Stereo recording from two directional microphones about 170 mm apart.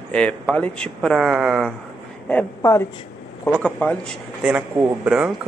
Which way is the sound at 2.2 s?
15° left (ahead or behind).